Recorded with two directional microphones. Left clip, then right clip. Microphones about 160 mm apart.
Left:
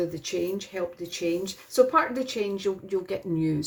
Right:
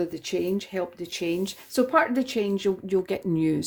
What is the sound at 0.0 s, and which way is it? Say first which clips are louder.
Speech: right 1 dB; 90° right.